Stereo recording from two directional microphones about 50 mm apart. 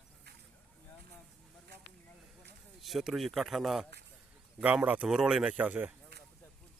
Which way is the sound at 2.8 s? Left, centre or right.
Centre.